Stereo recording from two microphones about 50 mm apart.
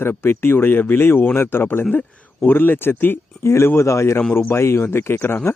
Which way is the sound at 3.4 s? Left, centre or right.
Left.